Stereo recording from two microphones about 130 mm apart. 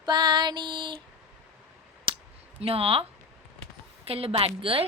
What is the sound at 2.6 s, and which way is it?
A woman's voice, 50° right (ahead or behind).